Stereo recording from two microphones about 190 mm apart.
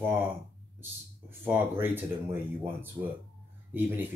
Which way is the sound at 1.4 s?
10° right (ahead or behind).